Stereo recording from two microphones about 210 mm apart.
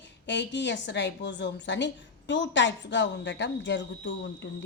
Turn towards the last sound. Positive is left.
turn(degrees=60)  # may be behind; listen again after turning